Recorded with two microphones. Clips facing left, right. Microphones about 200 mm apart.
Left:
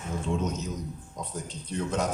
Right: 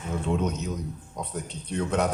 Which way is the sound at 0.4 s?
60° right (ahead or behind).